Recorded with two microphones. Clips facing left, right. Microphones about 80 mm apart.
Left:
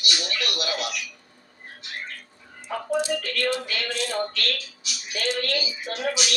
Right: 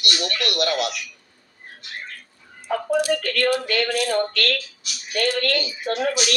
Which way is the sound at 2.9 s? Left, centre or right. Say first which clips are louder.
Right 4 dB; left.